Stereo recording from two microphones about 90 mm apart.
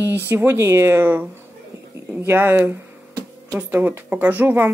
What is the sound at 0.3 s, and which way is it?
Speech, 25° right (ahead or behind).